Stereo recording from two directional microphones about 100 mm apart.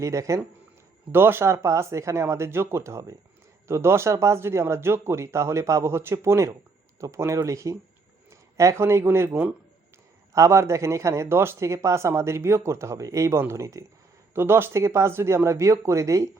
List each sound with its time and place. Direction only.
0.0 s a man's voice: 30° right (ahead or behind)